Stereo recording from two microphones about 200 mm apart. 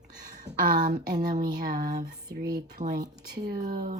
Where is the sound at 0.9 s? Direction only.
20° right (ahead or behind).